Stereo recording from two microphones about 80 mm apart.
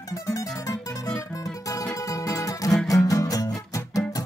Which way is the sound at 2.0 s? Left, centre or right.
Left.